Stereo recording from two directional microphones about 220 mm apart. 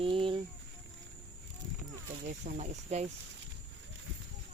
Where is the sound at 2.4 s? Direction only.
30° right (ahead or behind).